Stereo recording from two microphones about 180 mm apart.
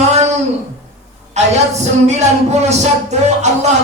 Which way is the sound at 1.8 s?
40° right (ahead or behind).